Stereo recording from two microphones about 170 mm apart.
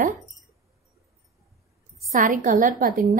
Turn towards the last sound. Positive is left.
turn(degrees=-55)  # may be behind; listen again after turning